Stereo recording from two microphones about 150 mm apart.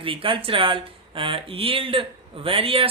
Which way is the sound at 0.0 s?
35° right (ahead or behind).